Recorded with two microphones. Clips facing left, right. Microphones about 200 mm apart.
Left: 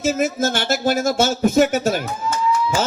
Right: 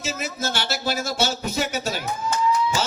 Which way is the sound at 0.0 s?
50° left (ahead or behind).